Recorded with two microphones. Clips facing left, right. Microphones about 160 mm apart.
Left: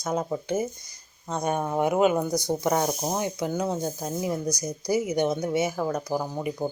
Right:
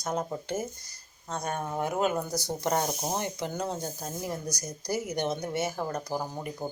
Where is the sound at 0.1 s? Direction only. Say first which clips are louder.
Left 5 dB; 10° left (ahead or behind).